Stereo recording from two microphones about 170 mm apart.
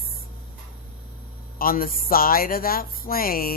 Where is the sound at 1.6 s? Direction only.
60° left (ahead or behind).